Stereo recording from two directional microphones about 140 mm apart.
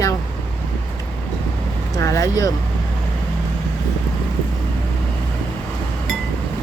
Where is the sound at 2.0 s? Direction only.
20° left (ahead or behind).